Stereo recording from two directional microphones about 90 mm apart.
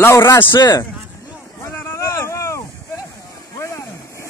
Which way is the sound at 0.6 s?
40° left (ahead or behind).